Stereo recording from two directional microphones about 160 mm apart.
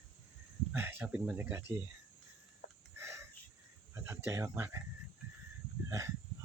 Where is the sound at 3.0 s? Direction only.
20° right (ahead or behind).